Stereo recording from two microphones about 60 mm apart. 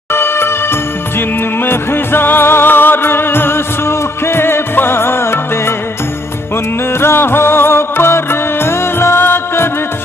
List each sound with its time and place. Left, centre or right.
0.1 s music: left
7.0 s music: left